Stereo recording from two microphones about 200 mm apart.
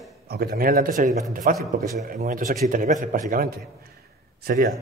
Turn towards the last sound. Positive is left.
turn(degrees=-50)  # may be behind; listen again after turning